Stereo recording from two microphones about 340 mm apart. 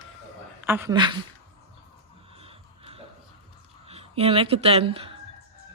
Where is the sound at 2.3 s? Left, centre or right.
Centre.